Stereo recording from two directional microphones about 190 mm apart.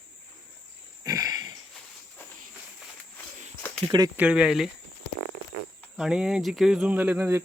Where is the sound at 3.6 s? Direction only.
10° left (ahead or behind).